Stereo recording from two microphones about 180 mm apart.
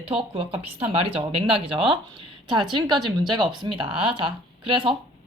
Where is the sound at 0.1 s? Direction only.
30° right (ahead or behind).